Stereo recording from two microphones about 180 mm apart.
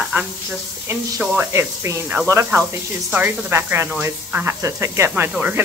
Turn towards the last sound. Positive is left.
turn(degrees=-10)  # may be behind; listen again after turning